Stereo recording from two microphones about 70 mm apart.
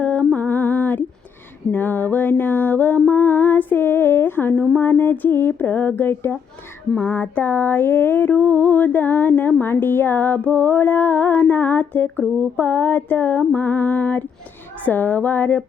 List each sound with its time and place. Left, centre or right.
0.0 s music: centre